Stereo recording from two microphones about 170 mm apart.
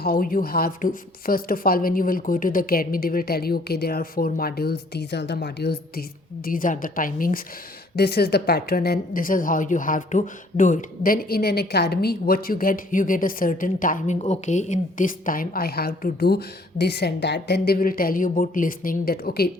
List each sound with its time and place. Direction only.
0.0 s speech: 60° left (ahead or behind); by 5.8 s 75° left (ahead or behind)
6.4 s speech: 55° left (ahead or behind)
7.9 s speech: 70° left (ahead or behind)